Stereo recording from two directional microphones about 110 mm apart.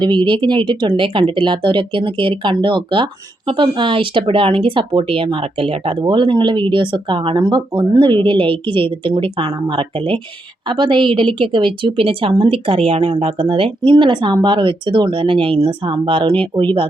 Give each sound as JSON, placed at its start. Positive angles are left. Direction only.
{"t": 0.0, "sound": "speech", "side_deg": -45}